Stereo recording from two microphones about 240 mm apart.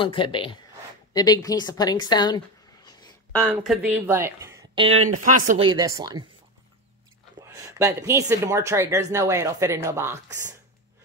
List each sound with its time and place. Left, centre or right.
0.0 s a woman's voice: left
3.5 s speech: centre
5.1 s speech: right
5.7 s speech: centre
7.4 s speech: centre